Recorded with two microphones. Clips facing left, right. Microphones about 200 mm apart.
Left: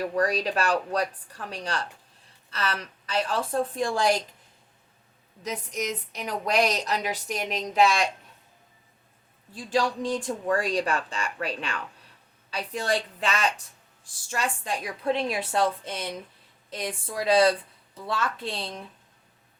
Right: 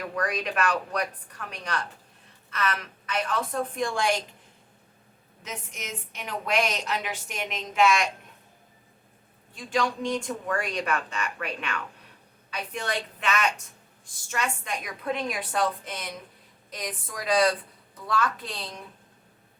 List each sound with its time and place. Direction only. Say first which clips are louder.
0.0 s a woman's voice: left 4 dB; 30° left (ahead or behind)
5.4 s a woman's voice: left 8 dB; 40° left (ahead or behind)
9.5 s a woman's voice: left 2 dB; 35° left (ahead or behind)